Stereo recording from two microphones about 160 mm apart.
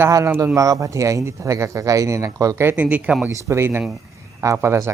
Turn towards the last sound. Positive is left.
turn(degrees=-15)  # may be behind; listen again after turning